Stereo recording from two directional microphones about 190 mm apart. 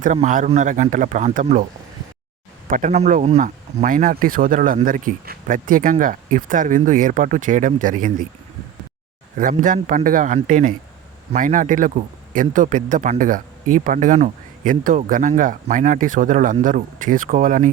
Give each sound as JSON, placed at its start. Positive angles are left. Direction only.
{"t": 0.0, "sound": "a man's voice", "side_deg": -40}
{"t": 2.6, "sound": "speech", "side_deg": -45}
{"t": 9.4, "sound": "speech", "side_deg": -45}